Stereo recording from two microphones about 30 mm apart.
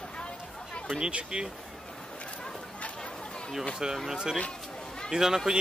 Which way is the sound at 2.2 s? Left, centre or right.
Left.